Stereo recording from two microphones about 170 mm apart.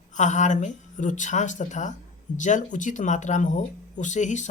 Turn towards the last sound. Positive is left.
turn(degrees=45)  # may be behind; listen again after turning